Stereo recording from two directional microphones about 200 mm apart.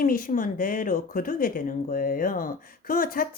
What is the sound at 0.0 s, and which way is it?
Speech, 45° left (ahead or behind).